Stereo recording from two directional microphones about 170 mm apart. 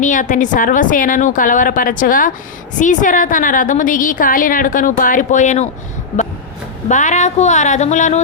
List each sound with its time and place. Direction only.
0.0 s a woman's voice: 50° left (ahead or behind)
6.8 s a woman's voice: 45° left (ahead or behind)